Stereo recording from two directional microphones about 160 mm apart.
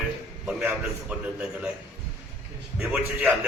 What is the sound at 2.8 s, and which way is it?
Speech, 5° right (ahead or behind).